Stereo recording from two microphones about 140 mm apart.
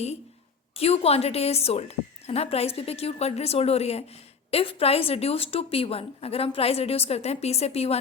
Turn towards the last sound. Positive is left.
turn(degrees=45)  # may be behind; listen again after turning